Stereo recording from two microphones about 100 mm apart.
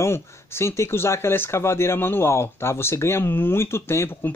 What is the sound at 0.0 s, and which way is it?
Speech, 25° left (ahead or behind).